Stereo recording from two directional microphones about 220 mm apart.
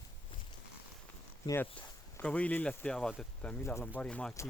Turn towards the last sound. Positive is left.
turn(degrees=5)  # may be behind; listen again after turning